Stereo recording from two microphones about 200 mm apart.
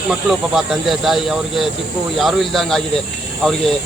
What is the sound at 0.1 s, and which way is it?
Speech, centre (ahead or behind).